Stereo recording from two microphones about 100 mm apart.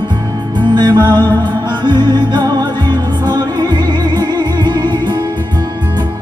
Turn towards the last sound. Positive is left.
turn(degrees=-45)  # may be behind; listen again after turning